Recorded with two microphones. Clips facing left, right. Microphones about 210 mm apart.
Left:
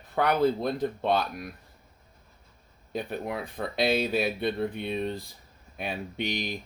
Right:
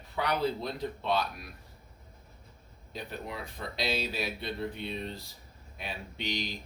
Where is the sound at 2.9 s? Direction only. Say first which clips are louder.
Left 7 dB; 55° left (ahead or behind).